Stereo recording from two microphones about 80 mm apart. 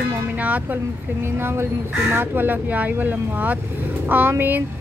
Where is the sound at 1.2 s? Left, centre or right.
Right.